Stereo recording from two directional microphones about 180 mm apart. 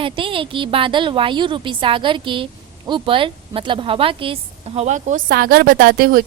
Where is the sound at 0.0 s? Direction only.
30° right (ahead or behind).